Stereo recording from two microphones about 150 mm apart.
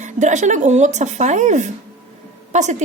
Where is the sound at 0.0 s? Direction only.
55° right (ahead or behind).